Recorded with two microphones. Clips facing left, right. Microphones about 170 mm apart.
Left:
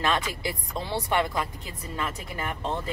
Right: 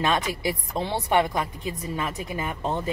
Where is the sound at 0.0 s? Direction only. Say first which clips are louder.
Right 3 dB; 20° right (ahead or behind).